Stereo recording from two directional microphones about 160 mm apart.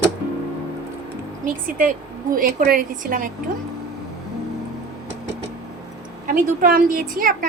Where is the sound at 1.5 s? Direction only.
60° right (ahead or behind).